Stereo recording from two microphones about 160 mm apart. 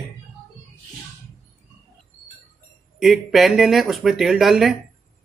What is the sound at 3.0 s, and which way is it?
Speech, centre (ahead or behind).